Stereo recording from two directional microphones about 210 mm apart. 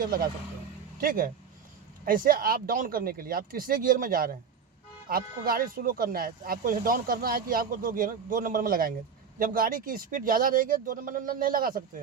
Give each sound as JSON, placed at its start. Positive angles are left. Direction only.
{"t": 0.0, "sound": "speech", "side_deg": -45}